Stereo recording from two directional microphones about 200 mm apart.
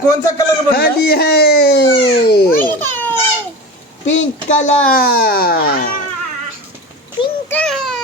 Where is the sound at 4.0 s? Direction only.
35° left (ahead or behind).